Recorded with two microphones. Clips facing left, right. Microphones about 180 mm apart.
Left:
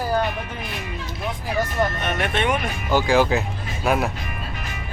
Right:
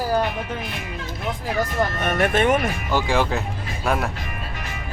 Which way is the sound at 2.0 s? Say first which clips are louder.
Right 4 dB; 45° right (ahead or behind).